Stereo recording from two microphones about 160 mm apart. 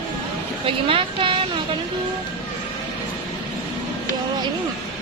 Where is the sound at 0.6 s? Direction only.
35° right (ahead or behind).